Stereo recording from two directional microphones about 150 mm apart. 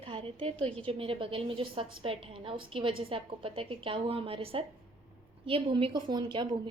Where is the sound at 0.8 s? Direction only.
35° right (ahead or behind).